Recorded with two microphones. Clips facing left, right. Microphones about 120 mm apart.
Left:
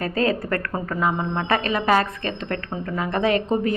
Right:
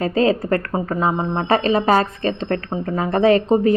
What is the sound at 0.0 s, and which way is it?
A woman's voice, 30° right (ahead or behind).